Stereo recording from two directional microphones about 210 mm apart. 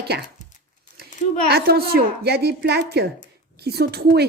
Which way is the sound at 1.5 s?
50° right (ahead or behind).